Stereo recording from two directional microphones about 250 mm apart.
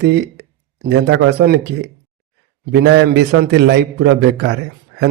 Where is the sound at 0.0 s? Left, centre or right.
Right.